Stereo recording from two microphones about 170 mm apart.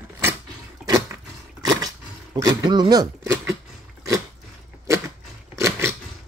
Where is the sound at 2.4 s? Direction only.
25° right (ahead or behind).